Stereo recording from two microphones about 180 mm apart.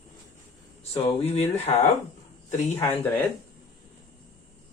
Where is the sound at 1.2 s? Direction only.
35° left (ahead or behind).